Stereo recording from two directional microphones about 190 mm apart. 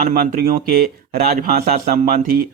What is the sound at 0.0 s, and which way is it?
Speech, 50° right (ahead or behind).